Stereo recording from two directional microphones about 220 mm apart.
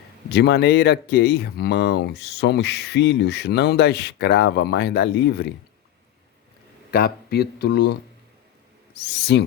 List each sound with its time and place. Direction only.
0.3 s speech: 50° left (ahead or behind)
6.9 s speech: 45° left (ahead or behind)
9.0 s speech: 50° left (ahead or behind)